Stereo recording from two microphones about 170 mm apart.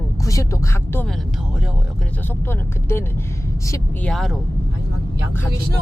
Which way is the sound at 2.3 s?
15° left (ahead or behind).